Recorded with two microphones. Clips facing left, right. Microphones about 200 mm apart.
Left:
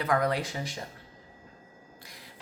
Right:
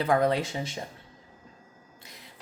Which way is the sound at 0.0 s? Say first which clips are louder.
Right 3 dB; 30° right (ahead or behind).